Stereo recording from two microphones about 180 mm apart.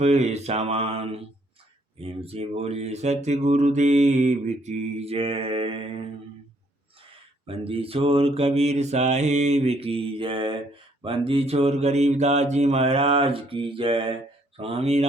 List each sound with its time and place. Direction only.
0.0 s speech: 40° right (ahead or behind)
7.4 s speech: 30° right (ahead or behind)